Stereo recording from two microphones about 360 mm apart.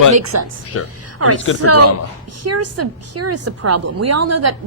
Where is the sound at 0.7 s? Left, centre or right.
Left.